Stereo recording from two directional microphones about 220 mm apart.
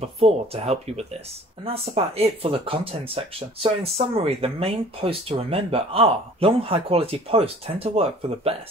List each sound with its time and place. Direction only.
0.0 s speech: 25° right (ahead or behind)